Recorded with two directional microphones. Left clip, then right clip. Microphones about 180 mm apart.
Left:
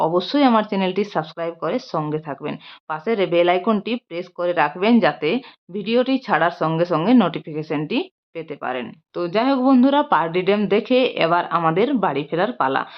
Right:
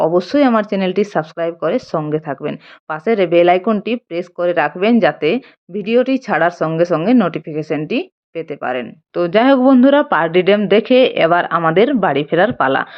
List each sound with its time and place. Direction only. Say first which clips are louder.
0.0 s speech: right 4 dB; 30° right (ahead or behind)